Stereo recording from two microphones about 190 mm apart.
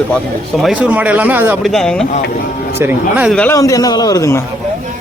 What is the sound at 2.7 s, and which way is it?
Speech, 10° right (ahead or behind).